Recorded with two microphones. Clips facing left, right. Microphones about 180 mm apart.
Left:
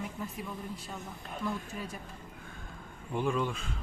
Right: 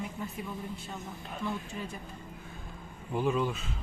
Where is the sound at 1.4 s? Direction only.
Centre (ahead or behind).